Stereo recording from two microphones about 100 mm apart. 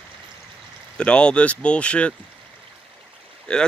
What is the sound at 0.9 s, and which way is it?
Speech, 10° left (ahead or behind).